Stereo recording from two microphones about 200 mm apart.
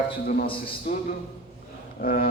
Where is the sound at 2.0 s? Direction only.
45° left (ahead or behind).